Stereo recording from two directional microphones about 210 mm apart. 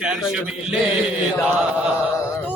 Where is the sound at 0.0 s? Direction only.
5° right (ahead or behind).